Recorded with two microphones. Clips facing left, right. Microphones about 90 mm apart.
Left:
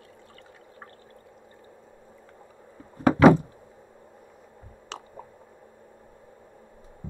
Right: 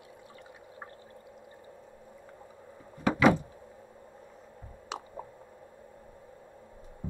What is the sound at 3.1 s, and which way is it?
Door, 40° left (ahead or behind).